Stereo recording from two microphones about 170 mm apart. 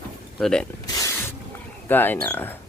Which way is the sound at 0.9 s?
20° left (ahead or behind).